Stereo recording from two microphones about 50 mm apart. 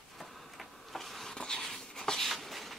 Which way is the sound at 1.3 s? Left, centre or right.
Centre.